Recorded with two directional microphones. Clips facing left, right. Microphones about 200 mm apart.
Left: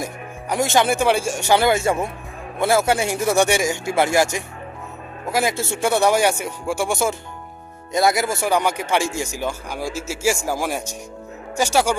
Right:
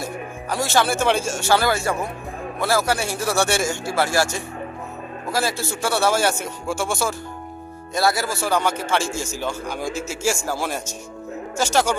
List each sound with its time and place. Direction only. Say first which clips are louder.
0.5 s a man's voice: left 3 dB; 20° left (ahead or behind)